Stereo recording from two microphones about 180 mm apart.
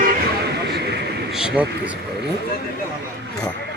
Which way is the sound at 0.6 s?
65° right (ahead or behind).